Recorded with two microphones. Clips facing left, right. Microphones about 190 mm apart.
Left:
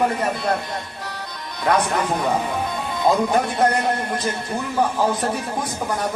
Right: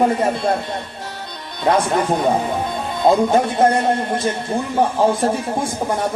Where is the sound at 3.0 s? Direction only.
25° right (ahead or behind).